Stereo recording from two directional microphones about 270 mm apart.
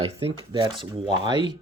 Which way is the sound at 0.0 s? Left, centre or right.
Right.